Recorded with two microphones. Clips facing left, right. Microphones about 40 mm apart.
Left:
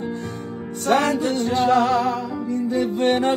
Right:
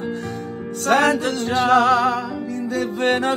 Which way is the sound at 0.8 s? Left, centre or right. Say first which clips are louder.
Right 2 dB; right.